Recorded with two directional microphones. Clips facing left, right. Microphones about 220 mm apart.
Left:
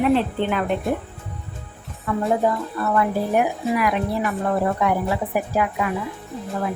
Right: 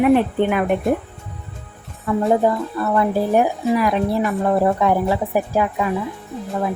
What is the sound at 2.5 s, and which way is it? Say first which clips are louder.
Speech: right 3 dB; 30° right (ahead or behind).